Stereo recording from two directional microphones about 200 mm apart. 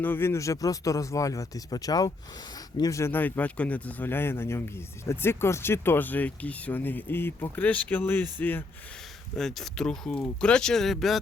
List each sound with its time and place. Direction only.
0.0 s speech: 10° left (ahead or behind)